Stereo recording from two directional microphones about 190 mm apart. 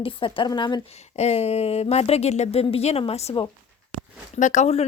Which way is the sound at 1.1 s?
35° left (ahead or behind).